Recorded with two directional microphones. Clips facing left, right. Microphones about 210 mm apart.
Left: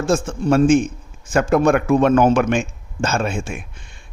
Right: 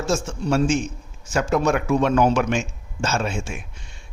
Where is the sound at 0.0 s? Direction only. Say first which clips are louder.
Left 5 dB; 55° left (ahead or behind).